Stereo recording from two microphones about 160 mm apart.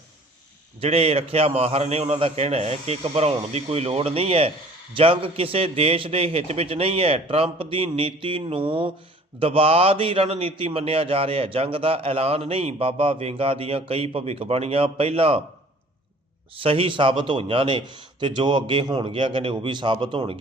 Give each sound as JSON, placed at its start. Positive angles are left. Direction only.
{"t": 0.8, "sound": "a man's voice", "side_deg": -40}
{"t": 16.6, "sound": "a man's voice", "side_deg": -35}